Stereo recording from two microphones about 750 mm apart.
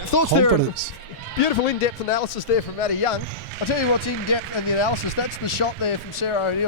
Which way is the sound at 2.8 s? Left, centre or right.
Left.